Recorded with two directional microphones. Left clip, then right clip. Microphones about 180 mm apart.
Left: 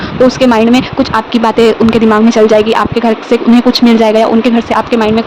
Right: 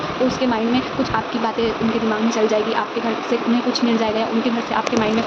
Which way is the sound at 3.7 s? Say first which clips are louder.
Left 13 dB; 70° left (ahead or behind).